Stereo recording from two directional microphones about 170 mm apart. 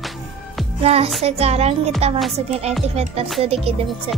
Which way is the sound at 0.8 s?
35° right (ahead or behind).